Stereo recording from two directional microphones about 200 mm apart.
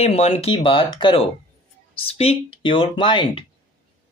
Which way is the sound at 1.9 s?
30° left (ahead or behind).